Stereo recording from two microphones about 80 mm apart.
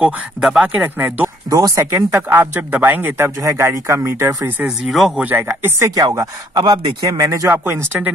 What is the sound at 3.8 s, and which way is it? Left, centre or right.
Speech, right.